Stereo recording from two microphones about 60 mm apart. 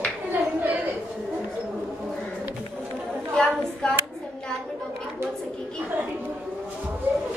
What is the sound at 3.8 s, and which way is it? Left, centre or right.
Speech, centre.